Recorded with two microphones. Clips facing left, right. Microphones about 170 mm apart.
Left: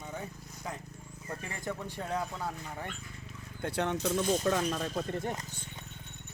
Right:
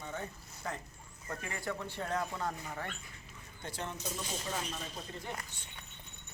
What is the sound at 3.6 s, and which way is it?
Speech, 65° left (ahead or behind).